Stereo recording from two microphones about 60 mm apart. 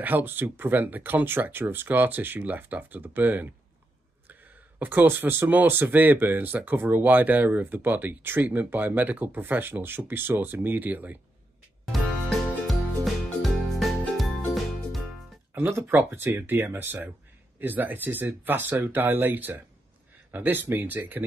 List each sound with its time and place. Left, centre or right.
0.0 s speech: right
11.9 s music: centre
15.5 s speech: right